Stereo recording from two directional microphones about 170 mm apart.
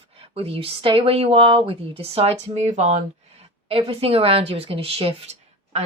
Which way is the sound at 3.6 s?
35° right (ahead or behind).